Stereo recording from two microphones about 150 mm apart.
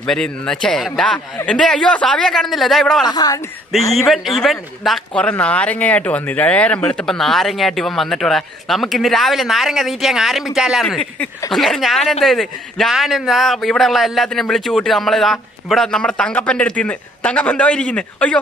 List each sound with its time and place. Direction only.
0.0 s speech: 5° left (ahead or behind)
3.1 s speech: 25° left (ahead or behind)
3.7 s a man's voice: centre (ahead or behind)